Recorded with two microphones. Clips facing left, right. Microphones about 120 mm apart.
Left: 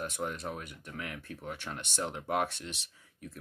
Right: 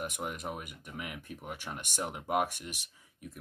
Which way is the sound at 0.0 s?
15° right (ahead or behind).